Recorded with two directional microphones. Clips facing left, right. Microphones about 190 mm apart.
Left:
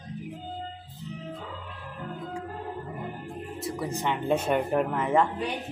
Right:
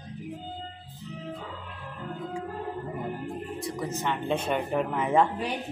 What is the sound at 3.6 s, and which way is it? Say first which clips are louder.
Speech: left 3 dB; 10° left (ahead or behind).